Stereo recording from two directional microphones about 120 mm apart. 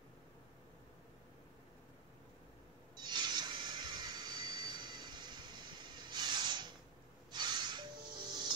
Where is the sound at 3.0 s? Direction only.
35° right (ahead or behind).